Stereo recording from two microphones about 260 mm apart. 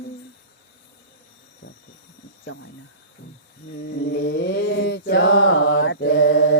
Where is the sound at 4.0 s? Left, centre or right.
Left.